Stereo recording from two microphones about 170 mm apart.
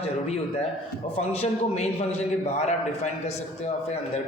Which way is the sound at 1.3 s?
35° left (ahead or behind).